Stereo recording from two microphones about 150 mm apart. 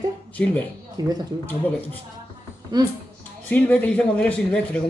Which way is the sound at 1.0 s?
25° right (ahead or behind).